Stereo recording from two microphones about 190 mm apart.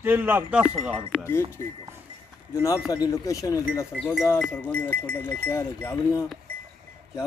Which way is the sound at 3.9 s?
Centre (ahead or behind).